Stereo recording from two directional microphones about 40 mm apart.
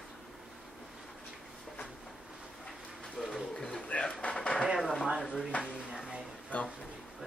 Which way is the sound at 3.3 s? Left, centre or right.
Centre.